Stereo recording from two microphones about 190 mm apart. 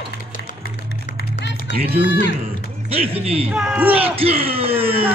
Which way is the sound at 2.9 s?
30° right (ahead or behind).